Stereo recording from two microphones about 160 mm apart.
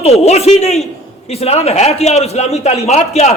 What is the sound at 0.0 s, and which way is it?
A man's voice, 40° left (ahead or behind).